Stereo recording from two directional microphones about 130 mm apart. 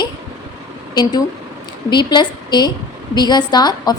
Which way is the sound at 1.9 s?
35° left (ahead or behind).